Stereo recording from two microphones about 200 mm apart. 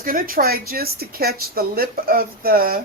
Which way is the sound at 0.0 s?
45° right (ahead or behind).